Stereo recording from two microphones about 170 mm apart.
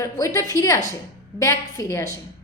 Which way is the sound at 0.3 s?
20° left (ahead or behind).